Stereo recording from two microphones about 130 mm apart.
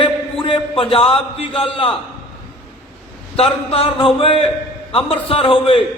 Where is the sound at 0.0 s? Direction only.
40° left (ahead or behind).